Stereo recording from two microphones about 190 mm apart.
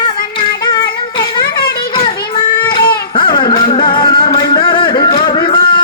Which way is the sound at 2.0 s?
25° left (ahead or behind).